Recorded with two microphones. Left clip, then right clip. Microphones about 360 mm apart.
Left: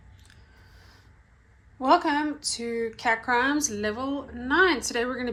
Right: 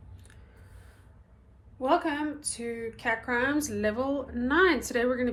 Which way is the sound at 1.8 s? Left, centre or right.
Centre.